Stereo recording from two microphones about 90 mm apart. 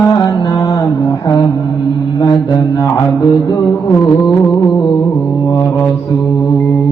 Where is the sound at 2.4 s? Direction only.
60° left (ahead or behind).